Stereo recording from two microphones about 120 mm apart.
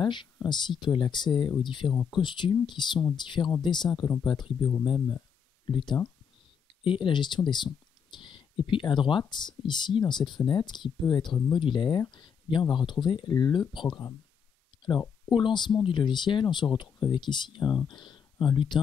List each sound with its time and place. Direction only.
0.0 s speech: 40° left (ahead or behind)
5.7 s speech: 35° left (ahead or behind)
15.3 s speech: 40° left (ahead or behind)